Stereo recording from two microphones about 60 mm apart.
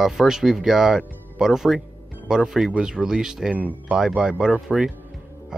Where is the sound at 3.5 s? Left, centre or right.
Right.